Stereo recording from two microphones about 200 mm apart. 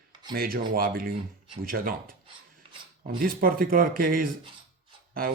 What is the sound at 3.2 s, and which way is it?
Speech, 45° right (ahead or behind).